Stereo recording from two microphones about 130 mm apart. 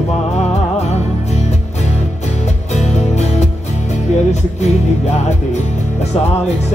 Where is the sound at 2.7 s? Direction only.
60° left (ahead or behind).